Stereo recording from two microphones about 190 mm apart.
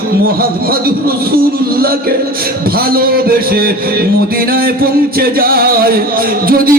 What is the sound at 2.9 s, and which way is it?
Speech, 50° right (ahead or behind).